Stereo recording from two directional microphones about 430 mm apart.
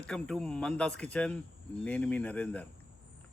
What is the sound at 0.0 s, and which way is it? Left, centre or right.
Speech, centre.